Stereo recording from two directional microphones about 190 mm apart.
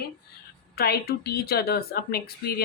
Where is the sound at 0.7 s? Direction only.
55° left (ahead or behind).